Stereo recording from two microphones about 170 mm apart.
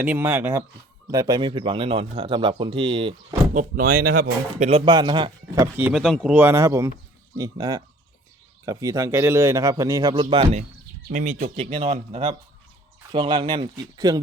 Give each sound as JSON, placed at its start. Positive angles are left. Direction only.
{"t": 0.0, "sound": "speech", "side_deg": -10}
{"t": 3.5, "sound": "speech", "side_deg": -50}
{"t": 4.6, "sound": "a man's voice", "side_deg": -35}
{"t": 5.7, "sound": "speech", "side_deg": -10}
{"t": 6.0, "sound": "speech", "side_deg": 0}
{"t": 6.3, "sound": "a man's voice", "side_deg": -15}
{"t": 11.1, "sound": "speech", "side_deg": -50}
{"t": 11.5, "sound": "a man's voice", "side_deg": -35}